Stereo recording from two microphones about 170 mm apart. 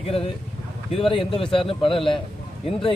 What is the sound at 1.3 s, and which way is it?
Speech, 30° left (ahead or behind).